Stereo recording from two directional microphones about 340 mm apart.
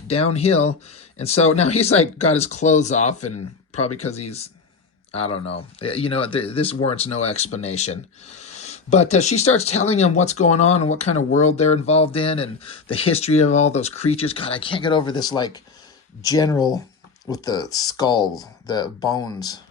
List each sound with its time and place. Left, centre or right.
0.1 s speech: centre